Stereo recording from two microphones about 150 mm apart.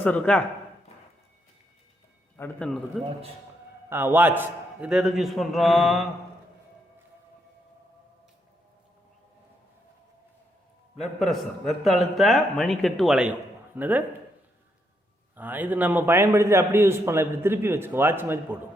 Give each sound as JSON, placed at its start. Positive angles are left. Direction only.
{"t": 0.0, "sound": "a man's voice", "side_deg": 10}
{"t": 2.3, "sound": "a man's voice", "side_deg": 10}
{"t": 3.8, "sound": "a man's voice", "side_deg": -15}
{"t": 10.9, "sound": "a man's voice", "side_deg": 0}
{"t": 15.4, "sound": "a man's voice", "side_deg": -10}